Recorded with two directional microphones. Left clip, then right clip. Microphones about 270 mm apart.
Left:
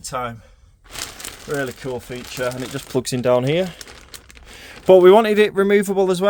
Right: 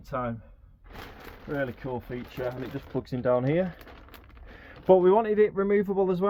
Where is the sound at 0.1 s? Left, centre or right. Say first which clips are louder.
Left 6 dB; left.